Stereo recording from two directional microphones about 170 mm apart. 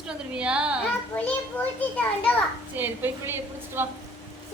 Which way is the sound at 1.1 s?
10° left (ahead or behind).